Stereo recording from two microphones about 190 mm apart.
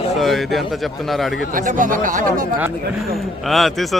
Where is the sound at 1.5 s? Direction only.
45° right (ahead or behind).